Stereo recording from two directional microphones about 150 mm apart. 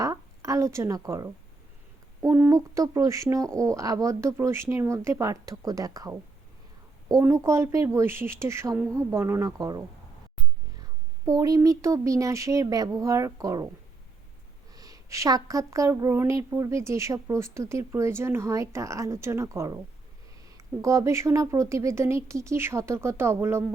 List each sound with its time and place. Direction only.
0.0 s a sound: 20° right (ahead or behind)
2.2 s a woman's voice: 20° right (ahead or behind)
11.3 s a woman's voice: 25° right (ahead or behind)
14.7 s a woman's voice: 25° right (ahead or behind)